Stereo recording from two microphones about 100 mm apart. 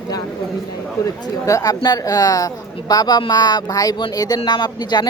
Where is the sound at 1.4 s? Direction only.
35° left (ahead or behind).